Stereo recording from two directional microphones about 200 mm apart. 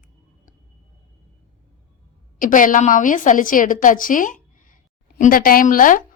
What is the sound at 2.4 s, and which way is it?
A woman's voice, 40° left (ahead or behind).